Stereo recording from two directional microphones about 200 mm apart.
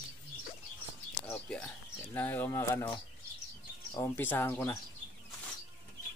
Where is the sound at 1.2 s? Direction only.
10° left (ahead or behind).